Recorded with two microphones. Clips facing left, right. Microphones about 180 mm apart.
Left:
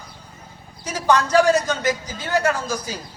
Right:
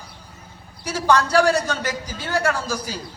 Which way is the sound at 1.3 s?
15° left (ahead or behind).